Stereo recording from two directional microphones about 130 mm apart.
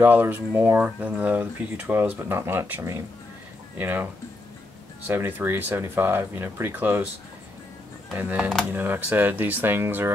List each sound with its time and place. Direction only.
0.0 s speech: 15° right (ahead or behind)
8.1 s speech: 10° right (ahead or behind)